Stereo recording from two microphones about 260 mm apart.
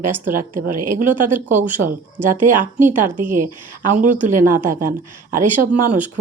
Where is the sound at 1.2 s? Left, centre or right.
Right.